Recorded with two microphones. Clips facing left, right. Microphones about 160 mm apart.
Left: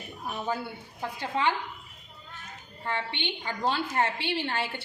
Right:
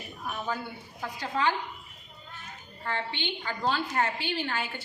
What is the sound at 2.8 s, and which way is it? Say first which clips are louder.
A woman's voice: left 1 dB; 20° left (ahead or behind).